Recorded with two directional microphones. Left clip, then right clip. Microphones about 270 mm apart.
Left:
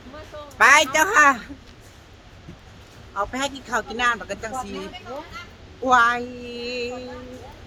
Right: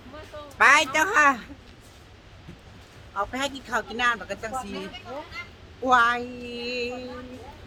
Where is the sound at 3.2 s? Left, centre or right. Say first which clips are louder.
Left 2 dB; centre.